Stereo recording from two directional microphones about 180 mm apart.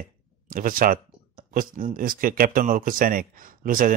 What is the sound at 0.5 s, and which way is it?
Speech, 50° right (ahead or behind).